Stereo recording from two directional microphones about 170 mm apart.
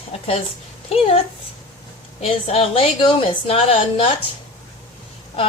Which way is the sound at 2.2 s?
35° left (ahead or behind).